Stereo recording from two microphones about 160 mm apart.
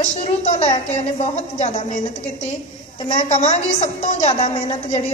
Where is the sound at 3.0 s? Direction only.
45° left (ahead or behind).